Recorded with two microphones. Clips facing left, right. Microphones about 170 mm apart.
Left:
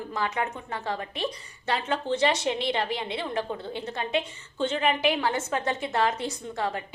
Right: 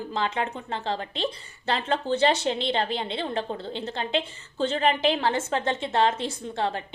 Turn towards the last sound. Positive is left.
turn(degrees=-30)  # may be behind; listen again after turning